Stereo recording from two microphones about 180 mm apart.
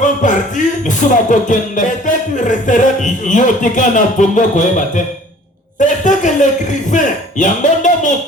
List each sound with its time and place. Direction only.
0.0 s music: 45° left (ahead or behind)